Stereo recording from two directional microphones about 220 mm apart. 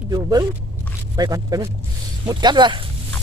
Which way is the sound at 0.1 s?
15° right (ahead or behind).